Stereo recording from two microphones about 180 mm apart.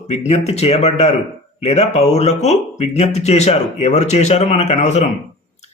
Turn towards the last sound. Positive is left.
turn(degrees=40)  # may be behind; listen again after turning